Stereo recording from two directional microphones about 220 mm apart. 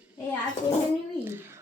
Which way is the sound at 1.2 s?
10° right (ahead or behind).